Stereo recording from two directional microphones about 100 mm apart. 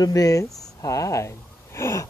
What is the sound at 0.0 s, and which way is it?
Speech, 35° left (ahead or behind).